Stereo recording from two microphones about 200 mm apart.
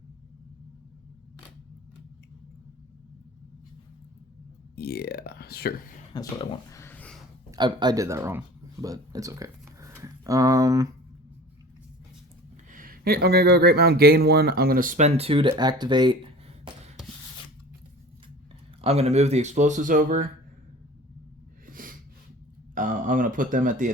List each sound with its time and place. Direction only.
4.7 s speech: 55° left (ahead or behind)
6.1 s a sound: 20° left (ahead or behind)
7.5 s speech: 20° right (ahead or behind)
12.7 s speech: 45° right (ahead or behind); by 16.1 s 20° right (ahead or behind)
18.8 s speech: 30° right (ahead or behind)
21.7 s snort: 45° right (ahead or behind)
22.7 s speech: 40° right (ahead or behind)